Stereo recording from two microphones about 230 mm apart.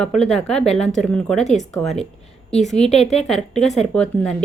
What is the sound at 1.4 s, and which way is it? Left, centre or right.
Speech, left.